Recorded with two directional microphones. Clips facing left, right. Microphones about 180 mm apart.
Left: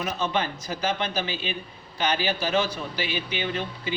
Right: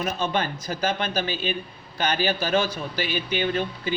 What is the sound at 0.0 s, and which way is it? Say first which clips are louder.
Speech: right 1 dB; 50° right (ahead or behind).